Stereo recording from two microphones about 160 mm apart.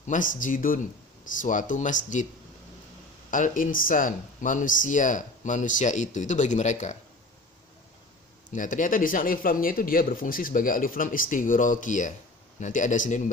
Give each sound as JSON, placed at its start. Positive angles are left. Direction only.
{"t": 0.1, "sound": "speech", "side_deg": 55}
{"t": 3.2, "sound": "speech", "side_deg": 55}
{"t": 8.4, "sound": "speech", "side_deg": 55}